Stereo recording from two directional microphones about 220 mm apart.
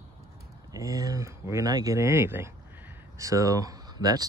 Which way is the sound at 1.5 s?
15° right (ahead or behind).